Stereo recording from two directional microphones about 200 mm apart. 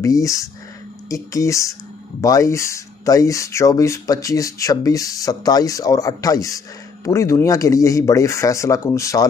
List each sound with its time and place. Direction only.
0.0 s speech: 15° left (ahead or behind)